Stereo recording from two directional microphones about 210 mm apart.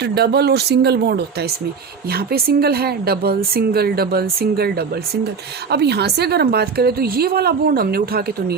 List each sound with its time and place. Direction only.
0.0 s a woman's voice: 50° right (ahead or behind)